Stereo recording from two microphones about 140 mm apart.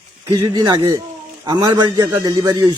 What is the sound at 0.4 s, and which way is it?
Speech, 30° right (ahead or behind).